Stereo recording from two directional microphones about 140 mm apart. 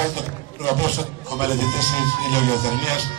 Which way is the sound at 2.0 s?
20° left (ahead or behind).